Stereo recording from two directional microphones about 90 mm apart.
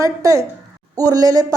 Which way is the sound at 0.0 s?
35° right (ahead or behind).